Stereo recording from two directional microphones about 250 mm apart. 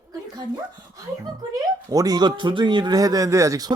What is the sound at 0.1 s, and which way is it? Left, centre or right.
Speech, centre.